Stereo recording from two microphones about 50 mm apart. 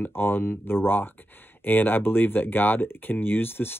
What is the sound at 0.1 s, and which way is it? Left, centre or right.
Speech, left.